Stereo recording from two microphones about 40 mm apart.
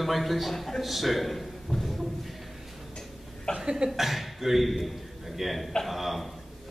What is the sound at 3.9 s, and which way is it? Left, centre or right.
A man's voice, centre.